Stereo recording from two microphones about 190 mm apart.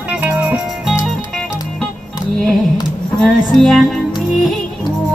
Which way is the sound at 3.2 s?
Centre (ahead or behind).